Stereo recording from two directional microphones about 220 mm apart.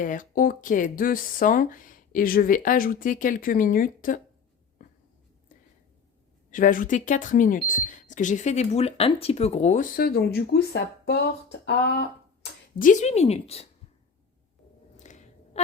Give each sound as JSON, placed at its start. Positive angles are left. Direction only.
{"t": 0.0, "sound": "speech", "side_deg": 35}
{"t": 6.5, "sound": "speech", "side_deg": 35}
{"t": 12.8, "sound": "speech", "side_deg": 35}
{"t": 14.9, "sound": "a sound", "side_deg": 30}